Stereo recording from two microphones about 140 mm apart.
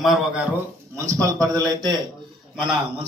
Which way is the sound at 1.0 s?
20° right (ahead or behind).